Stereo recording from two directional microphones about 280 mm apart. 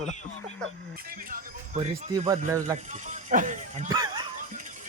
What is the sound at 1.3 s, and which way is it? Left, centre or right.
Speech, right.